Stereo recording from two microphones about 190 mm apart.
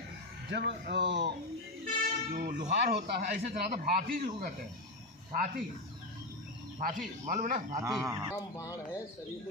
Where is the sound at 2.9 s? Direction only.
55° right (ahead or behind).